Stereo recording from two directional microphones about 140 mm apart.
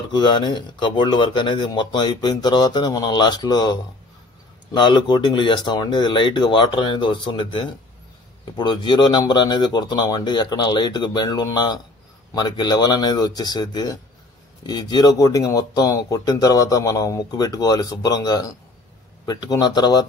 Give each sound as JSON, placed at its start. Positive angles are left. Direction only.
{"t": 0.1, "sound": "speech", "side_deg": 30}
{"t": 4.7, "sound": "speech", "side_deg": 30}